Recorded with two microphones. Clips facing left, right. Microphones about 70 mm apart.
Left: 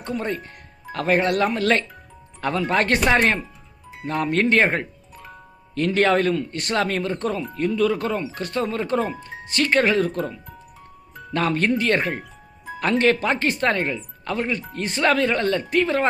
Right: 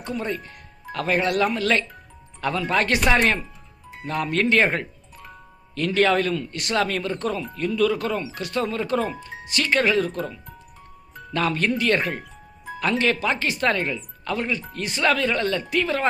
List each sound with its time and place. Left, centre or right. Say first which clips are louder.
0.3 s speech: left 1 dB; left
4.0 s speech: left 2 dB; left
11.1 s music: left 3 dB; centre
11.3 s speech: left 2 dB; left